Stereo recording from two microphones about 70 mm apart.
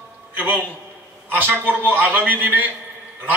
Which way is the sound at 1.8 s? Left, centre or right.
Right.